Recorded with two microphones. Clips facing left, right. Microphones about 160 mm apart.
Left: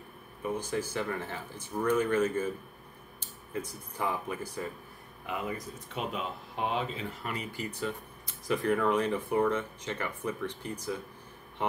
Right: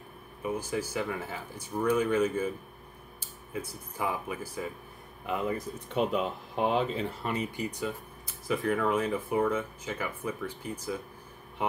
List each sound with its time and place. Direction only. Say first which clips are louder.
0.5 s speech: right 1 dB; 10° right (ahead or behind)
5.9 s speech: right 7 dB; 35° right (ahead or behind)
7.5 s speech: right 2 dB; 15° right (ahead or behind)
8.3 s speech: left 1 dB; centre (ahead or behind)